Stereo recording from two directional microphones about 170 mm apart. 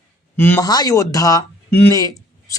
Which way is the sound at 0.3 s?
15° left (ahead or behind).